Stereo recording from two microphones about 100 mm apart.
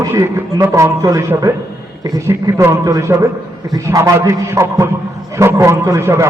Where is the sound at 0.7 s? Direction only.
35° right (ahead or behind).